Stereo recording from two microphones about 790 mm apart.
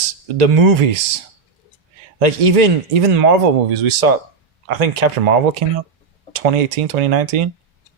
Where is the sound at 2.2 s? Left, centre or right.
Right.